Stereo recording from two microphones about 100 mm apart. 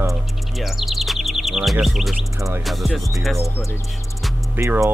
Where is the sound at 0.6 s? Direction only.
Centre (ahead or behind).